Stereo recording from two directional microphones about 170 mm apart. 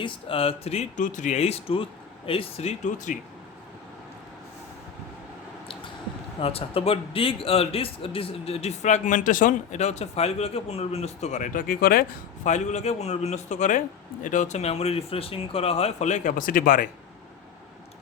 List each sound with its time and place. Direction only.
0.0 s a man's voice: 30° left (ahead or behind)
6.4 s a man's voice: 35° left (ahead or behind); by 12.0 s 60° left (ahead or behind)
12.5 s a man's voice: 45° left (ahead or behind)